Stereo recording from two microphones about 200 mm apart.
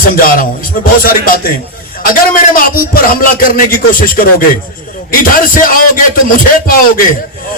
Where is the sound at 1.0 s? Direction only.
45° left (ahead or behind).